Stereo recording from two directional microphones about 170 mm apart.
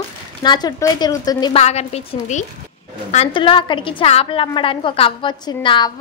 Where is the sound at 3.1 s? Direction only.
35° left (ahead or behind).